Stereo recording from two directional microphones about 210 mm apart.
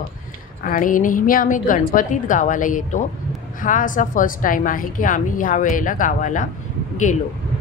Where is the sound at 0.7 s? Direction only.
40° left (ahead or behind).